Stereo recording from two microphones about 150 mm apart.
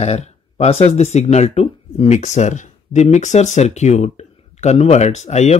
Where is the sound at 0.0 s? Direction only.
45° left (ahead or behind).